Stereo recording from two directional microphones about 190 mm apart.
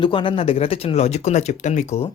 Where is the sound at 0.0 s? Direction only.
25° left (ahead or behind).